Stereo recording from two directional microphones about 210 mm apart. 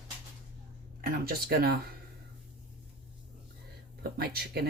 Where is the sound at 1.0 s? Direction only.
45° right (ahead or behind).